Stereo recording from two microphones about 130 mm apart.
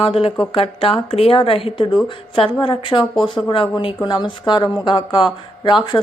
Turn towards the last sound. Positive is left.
turn(degrees=35)  # may be behind; listen again after turning